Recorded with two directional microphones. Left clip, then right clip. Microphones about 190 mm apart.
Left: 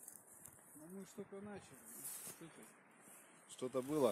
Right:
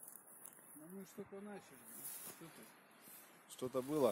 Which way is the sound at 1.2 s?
5° left (ahead or behind).